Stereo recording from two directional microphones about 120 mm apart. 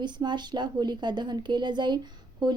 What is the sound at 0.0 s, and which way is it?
A woman's voice, 40° right (ahead or behind).